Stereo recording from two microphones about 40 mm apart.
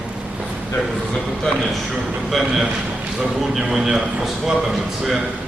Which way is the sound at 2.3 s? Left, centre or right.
Centre.